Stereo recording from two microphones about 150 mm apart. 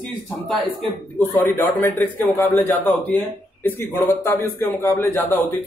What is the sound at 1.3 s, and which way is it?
A man's voice, 15° left (ahead or behind).